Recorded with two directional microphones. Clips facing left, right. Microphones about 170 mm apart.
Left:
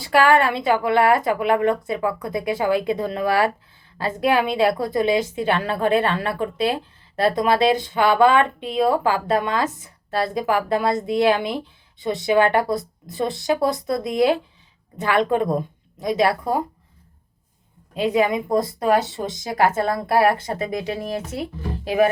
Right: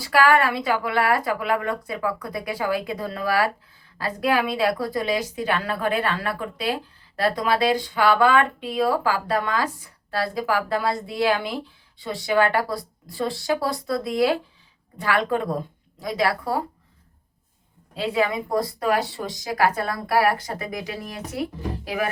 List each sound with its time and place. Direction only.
0.0 s a woman's voice: 25° left (ahead or behind)
17.9 s a woman's voice: 20° left (ahead or behind)